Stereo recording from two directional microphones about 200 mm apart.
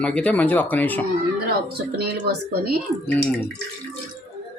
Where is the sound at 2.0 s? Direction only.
50° right (ahead or behind).